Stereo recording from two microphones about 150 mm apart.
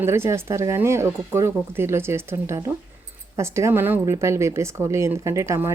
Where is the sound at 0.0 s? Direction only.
15° right (ahead or behind).